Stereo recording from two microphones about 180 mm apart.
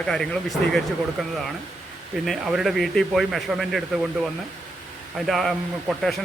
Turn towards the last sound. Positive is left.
turn(degrees=0)  # may be behind; listen again after turning